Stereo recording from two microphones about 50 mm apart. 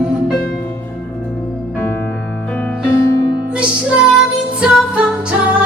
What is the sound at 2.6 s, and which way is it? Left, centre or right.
Music, left.